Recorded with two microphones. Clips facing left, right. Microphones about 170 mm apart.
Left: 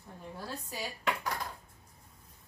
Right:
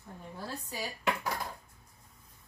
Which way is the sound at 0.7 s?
5° right (ahead or behind).